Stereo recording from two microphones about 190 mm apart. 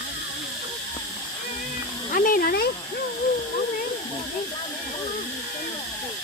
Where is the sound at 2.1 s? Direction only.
45° left (ahead or behind).